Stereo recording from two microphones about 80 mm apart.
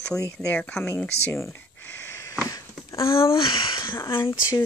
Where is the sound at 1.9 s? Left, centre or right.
Left.